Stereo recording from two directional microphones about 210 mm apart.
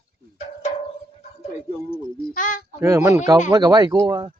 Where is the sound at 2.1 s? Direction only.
40° left (ahead or behind).